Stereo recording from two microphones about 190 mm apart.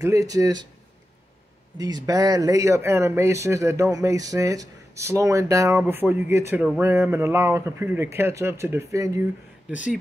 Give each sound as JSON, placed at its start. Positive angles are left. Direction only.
{"t": 0.0, "sound": "speech", "side_deg": -15}
{"t": 1.8, "sound": "speech", "side_deg": -20}